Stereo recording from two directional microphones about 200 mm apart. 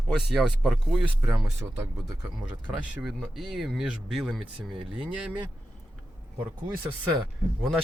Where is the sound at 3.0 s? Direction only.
Centre (ahead or behind).